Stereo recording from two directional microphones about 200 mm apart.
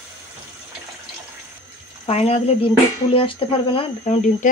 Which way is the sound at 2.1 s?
30° left (ahead or behind).